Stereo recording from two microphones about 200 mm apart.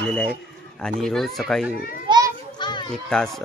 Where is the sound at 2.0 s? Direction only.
20° right (ahead or behind).